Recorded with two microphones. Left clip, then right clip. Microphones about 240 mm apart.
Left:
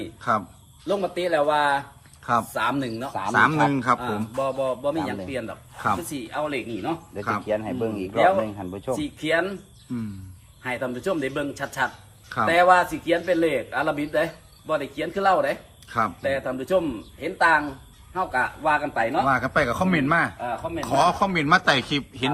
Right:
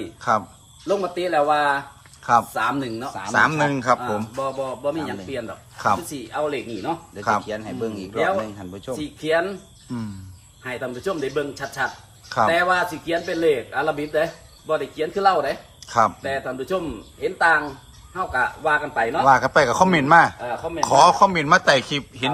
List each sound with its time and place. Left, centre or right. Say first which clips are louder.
0.2 s a man's voice: right 3 dB; centre
7.4 s speech: left 2 dB; centre
9.0 s speech: right 4 dB; centre
10.6 s speech: even; centre
15.9 s a man's voice: right 4 dB; centre
19.3 s speech: right 6 dB; centre